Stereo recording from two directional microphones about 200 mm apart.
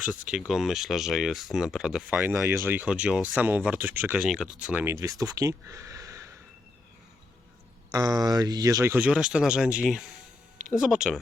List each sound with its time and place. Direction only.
0.3 s speech: 5° right (ahead or behind)
7.9 s speech: 20° right (ahead or behind); by 11.2 s 5° right (ahead or behind)